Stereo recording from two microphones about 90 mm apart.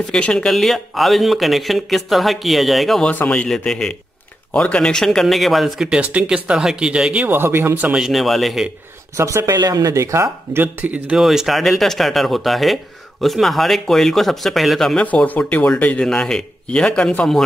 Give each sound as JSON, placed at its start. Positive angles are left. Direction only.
{"t": 0.1, "sound": "speech", "side_deg": 5}
{"t": 3.1, "sound": "speech", "side_deg": 15}
{"t": 3.4, "sound": "speech", "side_deg": 5}
{"t": 7.2, "sound": "speech", "side_deg": -25}
{"t": 7.9, "sound": "speech", "side_deg": -5}
{"t": 9.1, "sound": "speech", "side_deg": -35}
{"t": 9.6, "sound": "speech", "side_deg": -45}
{"t": 11.1, "sound": "speech", "side_deg": -5}
{"t": 15.0, "sound": "speech", "side_deg": 20}